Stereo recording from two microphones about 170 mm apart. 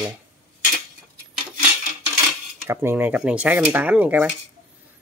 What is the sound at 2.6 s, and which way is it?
Speech, 15° right (ahead or behind).